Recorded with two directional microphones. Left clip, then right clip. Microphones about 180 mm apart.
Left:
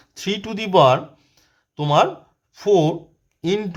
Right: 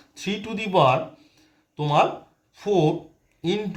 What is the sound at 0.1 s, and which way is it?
Speech, 40° left (ahead or behind).